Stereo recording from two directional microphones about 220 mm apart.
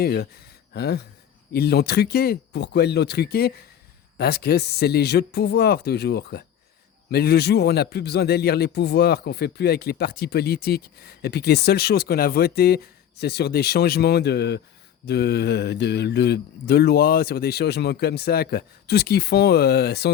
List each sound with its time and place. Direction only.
0.0 s a man's voice: 45° left (ahead or behind)